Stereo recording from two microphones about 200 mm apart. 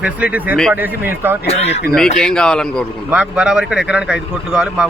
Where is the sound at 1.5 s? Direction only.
30° left (ahead or behind).